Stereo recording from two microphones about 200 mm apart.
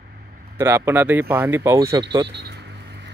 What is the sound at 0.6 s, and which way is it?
Speech, 15° right (ahead or behind).